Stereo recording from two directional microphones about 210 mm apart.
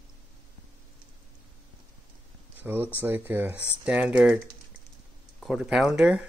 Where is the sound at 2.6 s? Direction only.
10° right (ahead or behind).